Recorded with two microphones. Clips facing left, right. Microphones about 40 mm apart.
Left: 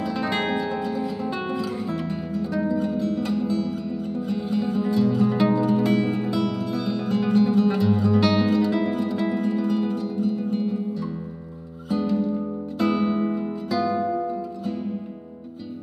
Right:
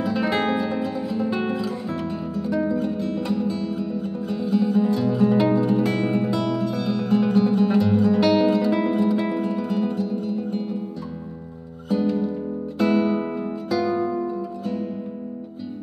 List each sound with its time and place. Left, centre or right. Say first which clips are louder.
0.0 s guitar: right 3 dB; centre
3.4 s music: even; centre
4.4 s music: right 6 dB; centre
4.7 s music: right 1 dB; centre
11.9 s music: right 1 dB; centre